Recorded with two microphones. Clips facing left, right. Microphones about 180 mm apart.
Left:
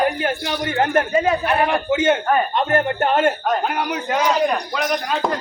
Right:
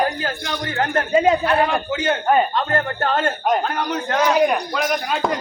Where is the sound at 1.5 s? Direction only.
20° left (ahead or behind).